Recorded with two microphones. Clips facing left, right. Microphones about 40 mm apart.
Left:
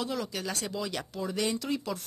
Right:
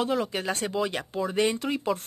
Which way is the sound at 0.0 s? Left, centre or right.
Right.